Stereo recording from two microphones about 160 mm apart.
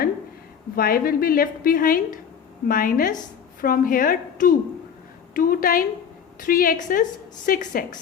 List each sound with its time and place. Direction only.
0.8 s a woman's voice: 65° left (ahead or behind)